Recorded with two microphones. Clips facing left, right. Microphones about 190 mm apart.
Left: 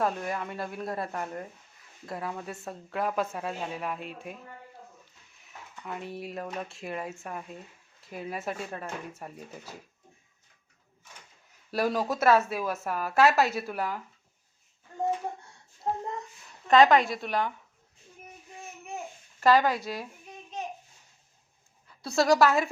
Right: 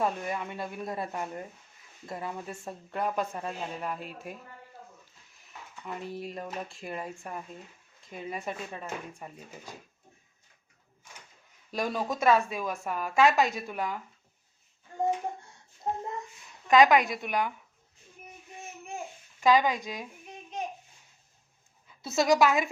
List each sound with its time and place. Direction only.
0.0 s a woman's voice: centre (ahead or behind)
5.4 s a woman's voice: centre (ahead or behind)
11.7 s a woman's voice: 5° left (ahead or behind)
16.6 s a woman's voice: 15° right (ahead or behind)
19.4 s speech: 15° right (ahead or behind)
19.8 s a woman's voice: 5° left (ahead or behind)
22.0 s a woman's voice: centre (ahead or behind)